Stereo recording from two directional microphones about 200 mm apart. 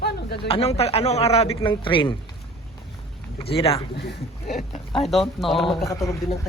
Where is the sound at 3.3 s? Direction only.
30° left (ahead or behind).